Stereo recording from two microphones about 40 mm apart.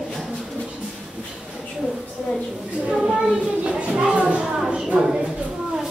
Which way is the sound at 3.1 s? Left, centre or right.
Right.